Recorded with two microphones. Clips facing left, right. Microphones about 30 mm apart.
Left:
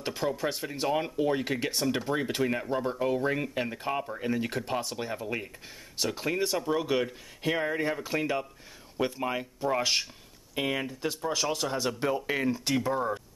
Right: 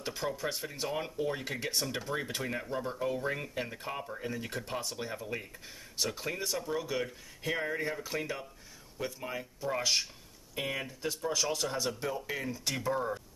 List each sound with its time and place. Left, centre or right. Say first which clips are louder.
0.0 s speech: left 5 dB; centre
8.9 s speech: left 8 dB; left; by 12.0 s centre
12.0 s speech: left 7 dB; left
12.6 s speech: left 5 dB; centre